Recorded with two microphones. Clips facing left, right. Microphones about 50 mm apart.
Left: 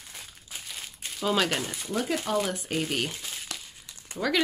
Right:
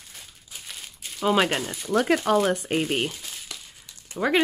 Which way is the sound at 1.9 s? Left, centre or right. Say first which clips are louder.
Right 7 dB; right.